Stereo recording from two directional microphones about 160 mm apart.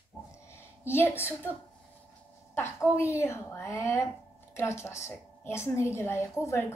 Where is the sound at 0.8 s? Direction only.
15° left (ahead or behind).